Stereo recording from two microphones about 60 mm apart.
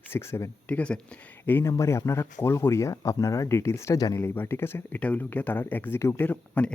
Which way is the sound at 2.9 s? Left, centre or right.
Left.